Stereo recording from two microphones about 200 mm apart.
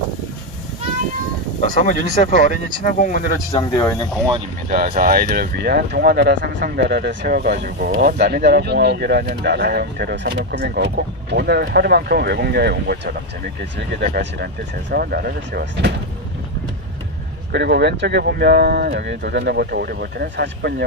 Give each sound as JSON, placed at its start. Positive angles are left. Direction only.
{"t": 1.6, "sound": "speech", "side_deg": 40}
{"t": 3.5, "sound": "speech", "side_deg": 20}
{"t": 4.6, "sound": "speech", "side_deg": -45}
{"t": 17.5, "sound": "speech", "side_deg": -55}